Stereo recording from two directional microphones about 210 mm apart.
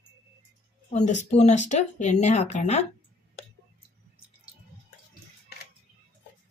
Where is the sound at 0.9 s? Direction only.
35° left (ahead or behind).